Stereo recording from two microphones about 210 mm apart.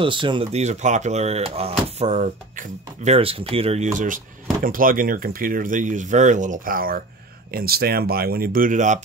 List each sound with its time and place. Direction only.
0.0 s speech: 25° right (ahead or behind)